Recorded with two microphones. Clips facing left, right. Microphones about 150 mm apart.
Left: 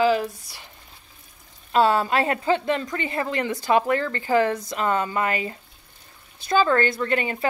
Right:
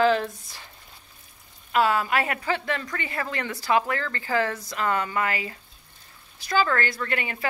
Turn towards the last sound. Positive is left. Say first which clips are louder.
# left 6 dB
turn(degrees=25)  # may be behind; listen again after turning